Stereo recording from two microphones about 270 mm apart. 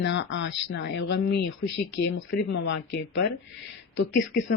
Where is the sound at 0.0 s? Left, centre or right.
Left.